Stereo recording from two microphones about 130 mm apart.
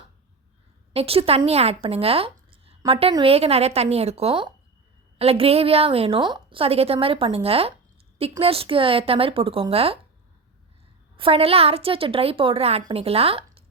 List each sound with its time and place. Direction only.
0.9 s a woman's voice: 45° right (ahead or behind)
11.2 s a woman's voice: 45° right (ahead or behind)